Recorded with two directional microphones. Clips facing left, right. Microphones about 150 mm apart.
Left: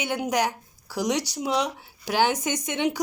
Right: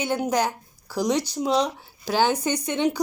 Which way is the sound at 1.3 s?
35° right (ahead or behind).